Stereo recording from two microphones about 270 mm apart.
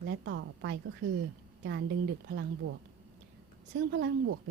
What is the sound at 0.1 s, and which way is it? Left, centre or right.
Speech, right.